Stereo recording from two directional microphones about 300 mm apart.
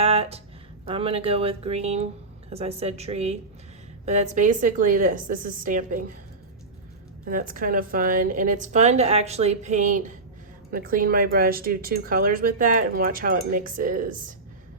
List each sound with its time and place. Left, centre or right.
0.0 s a sound: centre
0.9 s a woman's voice: centre
7.3 s a woman's voice: right